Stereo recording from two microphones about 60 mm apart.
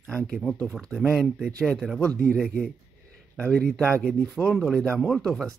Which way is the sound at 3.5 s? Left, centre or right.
Centre.